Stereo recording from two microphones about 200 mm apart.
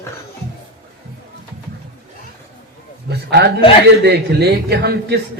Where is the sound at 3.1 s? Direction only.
55° right (ahead or behind).